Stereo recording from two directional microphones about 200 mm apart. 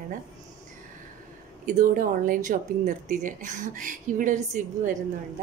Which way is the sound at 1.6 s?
40° right (ahead or behind).